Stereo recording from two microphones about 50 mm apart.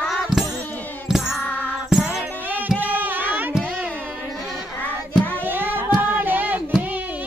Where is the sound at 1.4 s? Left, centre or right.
Left.